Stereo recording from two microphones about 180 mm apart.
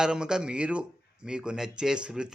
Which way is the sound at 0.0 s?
5° right (ahead or behind).